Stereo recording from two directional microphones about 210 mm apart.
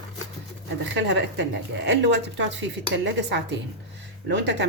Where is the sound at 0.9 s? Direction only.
60° right (ahead or behind).